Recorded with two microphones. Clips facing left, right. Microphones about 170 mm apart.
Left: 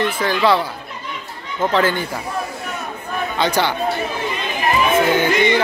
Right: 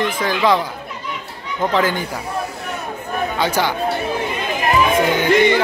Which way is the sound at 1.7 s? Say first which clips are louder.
Left 1 dB; 10° right (ahead or behind).